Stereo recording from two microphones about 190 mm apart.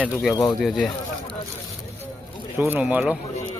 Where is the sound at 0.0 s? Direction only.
5° right (ahead or behind).